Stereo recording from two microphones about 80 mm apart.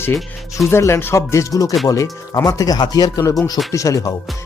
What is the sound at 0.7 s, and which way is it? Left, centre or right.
Speech, left.